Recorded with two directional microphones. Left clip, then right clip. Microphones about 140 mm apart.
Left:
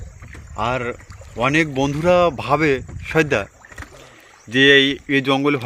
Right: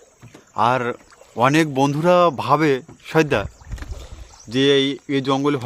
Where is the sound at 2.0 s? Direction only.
30° right (ahead or behind).